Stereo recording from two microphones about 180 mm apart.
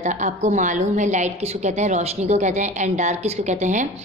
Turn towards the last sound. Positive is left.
turn(degrees=-40)  # may be behind; listen again after turning